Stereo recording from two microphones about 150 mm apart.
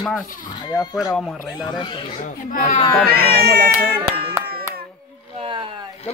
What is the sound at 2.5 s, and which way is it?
Speech, 65° left (ahead or behind).